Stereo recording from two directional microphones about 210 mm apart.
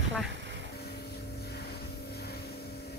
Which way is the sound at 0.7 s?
50° left (ahead or behind).